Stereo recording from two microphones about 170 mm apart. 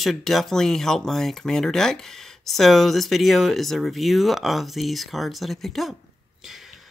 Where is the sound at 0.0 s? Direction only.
Centre (ahead or behind).